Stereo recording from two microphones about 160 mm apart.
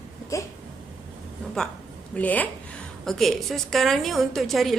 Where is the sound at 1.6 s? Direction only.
5° left (ahead or behind).